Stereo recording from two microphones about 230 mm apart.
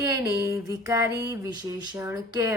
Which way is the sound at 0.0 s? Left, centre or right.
Centre.